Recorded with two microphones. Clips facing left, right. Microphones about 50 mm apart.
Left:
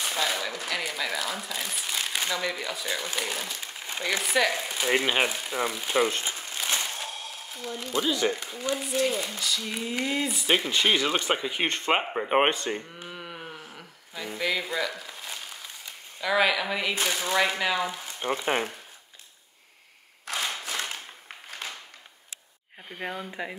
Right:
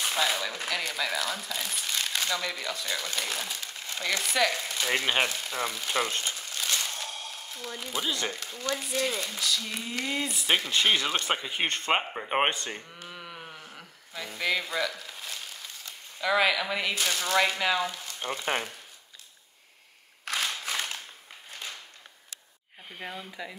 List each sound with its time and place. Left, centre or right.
0.0 s speech: centre
6.3 s crumpling: left
7.0 s a sound: centre
8.3 s speech: centre
13.0 s sheep: centre
13.6 s crumpling: centre
16.2 s speech: centre
23.0 s speech: left